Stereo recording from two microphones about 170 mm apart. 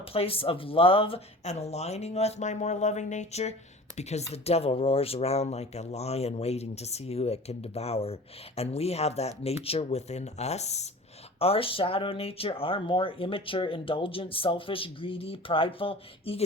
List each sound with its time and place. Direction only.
0.0 s speech: 35° left (ahead or behind)